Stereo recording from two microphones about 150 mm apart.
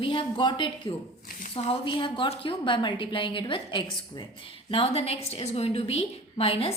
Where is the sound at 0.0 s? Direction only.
35° left (ahead or behind).